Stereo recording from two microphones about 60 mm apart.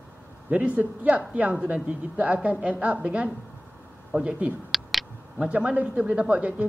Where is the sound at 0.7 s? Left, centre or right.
Right.